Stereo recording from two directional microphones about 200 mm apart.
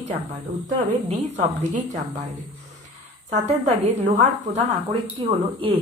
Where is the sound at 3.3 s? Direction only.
35° right (ahead or behind).